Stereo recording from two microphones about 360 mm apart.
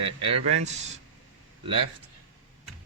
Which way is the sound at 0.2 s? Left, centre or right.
Centre.